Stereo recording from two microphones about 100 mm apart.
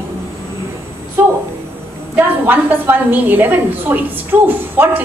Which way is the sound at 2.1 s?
20° right (ahead or behind).